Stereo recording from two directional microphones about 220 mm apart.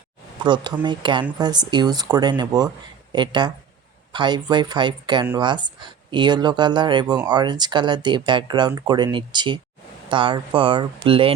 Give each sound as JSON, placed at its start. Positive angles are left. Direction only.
{"t": 0.4, "sound": "speech", "side_deg": -20}